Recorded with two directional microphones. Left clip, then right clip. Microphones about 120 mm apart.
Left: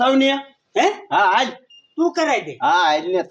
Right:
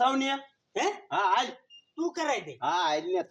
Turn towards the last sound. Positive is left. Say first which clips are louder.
# left 11 dB
turn(degrees=-10)  # may be behind; listen again after turning